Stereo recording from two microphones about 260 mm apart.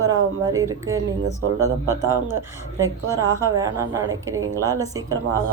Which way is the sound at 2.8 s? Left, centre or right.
Centre.